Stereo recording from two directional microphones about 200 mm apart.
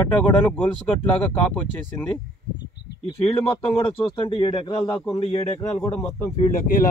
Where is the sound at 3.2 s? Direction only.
30° left (ahead or behind).